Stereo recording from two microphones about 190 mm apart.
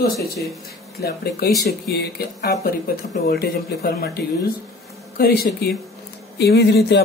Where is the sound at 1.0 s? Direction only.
55° left (ahead or behind).